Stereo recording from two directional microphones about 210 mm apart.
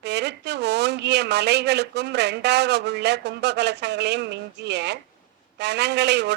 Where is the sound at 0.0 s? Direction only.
55° right (ahead or behind).